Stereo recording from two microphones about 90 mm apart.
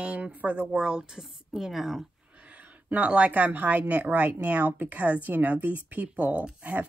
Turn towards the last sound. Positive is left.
turn(degrees=-15)  # may be behind; listen again after turning